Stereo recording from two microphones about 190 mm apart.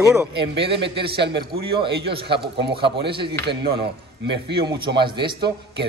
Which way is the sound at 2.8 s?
60° right (ahead or behind).